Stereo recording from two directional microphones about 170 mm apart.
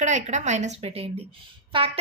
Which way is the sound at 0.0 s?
45° right (ahead or behind).